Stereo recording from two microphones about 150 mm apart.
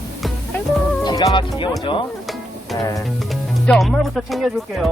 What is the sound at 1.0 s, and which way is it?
Music, 25° left (ahead or behind).